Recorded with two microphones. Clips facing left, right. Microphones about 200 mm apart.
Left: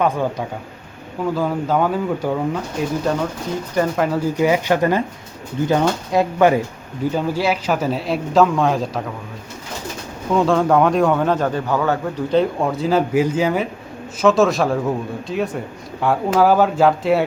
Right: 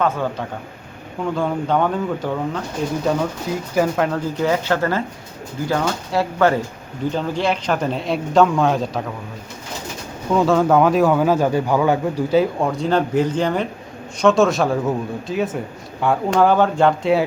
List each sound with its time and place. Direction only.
0.0 s speech: 15° left (ahead or behind)
3.1 s a man's voice: centre (ahead or behind)
4.4 s a man's voice: 15° left (ahead or behind)
10.3 s a man's voice: centre (ahead or behind)